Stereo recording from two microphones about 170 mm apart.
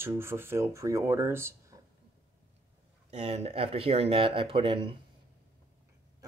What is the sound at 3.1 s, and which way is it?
Speech, 40° right (ahead or behind).